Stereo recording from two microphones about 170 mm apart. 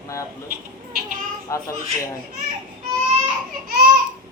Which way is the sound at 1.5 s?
20° left (ahead or behind).